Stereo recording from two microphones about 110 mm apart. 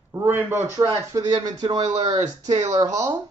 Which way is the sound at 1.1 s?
35° right (ahead or behind).